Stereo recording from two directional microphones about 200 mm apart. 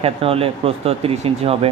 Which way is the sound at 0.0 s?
30° right (ahead or behind).